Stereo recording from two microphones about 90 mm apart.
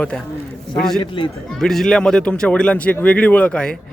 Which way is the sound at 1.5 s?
5° left (ahead or behind).